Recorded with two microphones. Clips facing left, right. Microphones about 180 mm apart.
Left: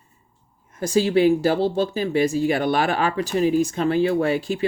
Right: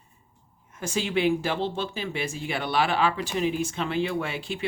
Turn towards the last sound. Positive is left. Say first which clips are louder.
# left 9 dB
turn(degrees=40)  # may be behind; listen again after turning